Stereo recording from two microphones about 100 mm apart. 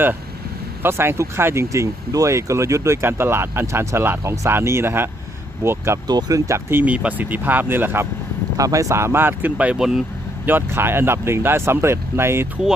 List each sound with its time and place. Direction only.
0.8 s speech: 25° right (ahead or behind)
6.1 s speech: 40° right (ahead or behind)
6.7 s speech: 20° right (ahead or behind)
8.5 s speech: 35° right (ahead or behind); by 10.0 s 5° right (ahead or behind)
10.4 s speech: 20° right (ahead or behind)